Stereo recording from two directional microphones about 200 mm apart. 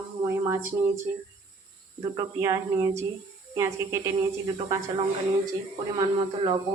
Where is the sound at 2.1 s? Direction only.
15° right (ahead or behind).